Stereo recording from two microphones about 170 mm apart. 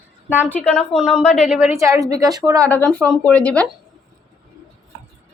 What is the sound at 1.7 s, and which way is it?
Speech, 15° right (ahead or behind).